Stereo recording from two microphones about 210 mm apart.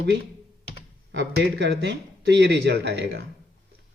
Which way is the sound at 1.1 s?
55° right (ahead or behind).